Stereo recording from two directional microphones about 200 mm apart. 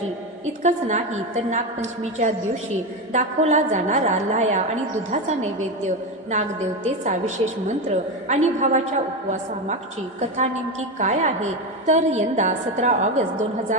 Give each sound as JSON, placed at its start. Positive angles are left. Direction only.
{"t": 0.6, "sound": "a woman's voice", "side_deg": -35}
{"t": 10.2, "sound": "a woman's voice", "side_deg": -35}